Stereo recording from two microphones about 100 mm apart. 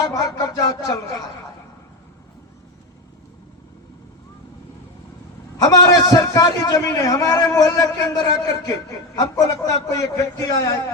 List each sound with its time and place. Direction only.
0.0 s a man's voice: 35° left (ahead or behind)
5.6 s a man's voice: 35° left (ahead or behind)